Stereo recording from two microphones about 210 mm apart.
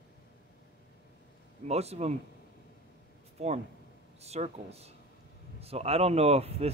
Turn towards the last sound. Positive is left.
turn(degrees=-30)  # may be behind; listen again after turning